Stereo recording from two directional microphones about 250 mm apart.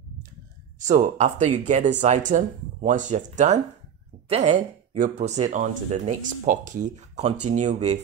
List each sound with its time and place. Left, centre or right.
0.7 s speech: right